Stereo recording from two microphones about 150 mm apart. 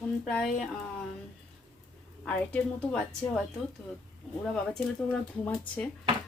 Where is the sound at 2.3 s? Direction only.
10° left (ahead or behind).